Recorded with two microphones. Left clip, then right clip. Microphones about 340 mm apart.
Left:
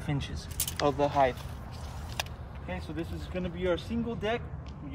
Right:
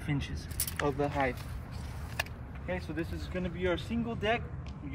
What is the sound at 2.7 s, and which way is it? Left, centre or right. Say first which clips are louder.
Speech: right 1 dB; centre.